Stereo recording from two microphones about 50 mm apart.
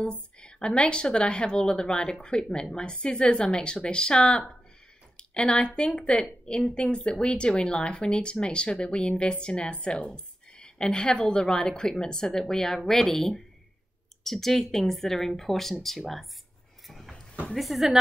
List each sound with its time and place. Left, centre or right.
0.0 s a woman's voice: centre
16.8 s a sound: centre
17.6 s speech: centre